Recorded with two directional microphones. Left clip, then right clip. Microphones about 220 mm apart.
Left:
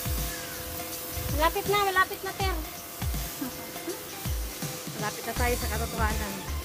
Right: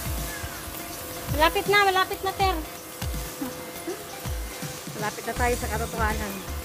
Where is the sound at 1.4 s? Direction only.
45° right (ahead or behind).